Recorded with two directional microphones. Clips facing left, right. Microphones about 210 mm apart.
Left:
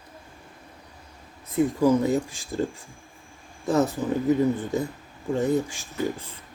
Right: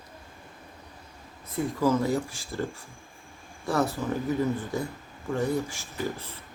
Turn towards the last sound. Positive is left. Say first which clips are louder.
# left 4 dB
turn(degrees=20)  # may be behind; listen again after turning